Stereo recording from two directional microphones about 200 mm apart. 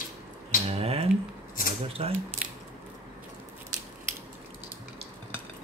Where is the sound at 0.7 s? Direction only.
30° right (ahead or behind).